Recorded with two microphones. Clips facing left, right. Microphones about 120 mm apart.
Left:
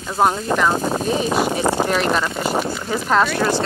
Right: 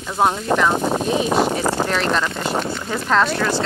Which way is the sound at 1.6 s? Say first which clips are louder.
Left 2 dB; 15° left (ahead or behind).